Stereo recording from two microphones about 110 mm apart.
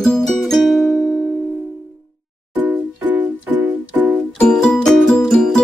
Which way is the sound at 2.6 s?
15° right (ahead or behind).